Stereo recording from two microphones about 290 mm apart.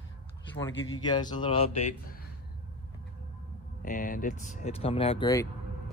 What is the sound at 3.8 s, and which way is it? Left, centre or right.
Speech, left.